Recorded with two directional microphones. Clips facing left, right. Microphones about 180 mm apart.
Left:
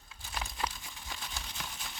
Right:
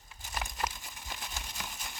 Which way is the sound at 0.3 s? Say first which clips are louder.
Right 1 dB; 15° right (ahead or behind).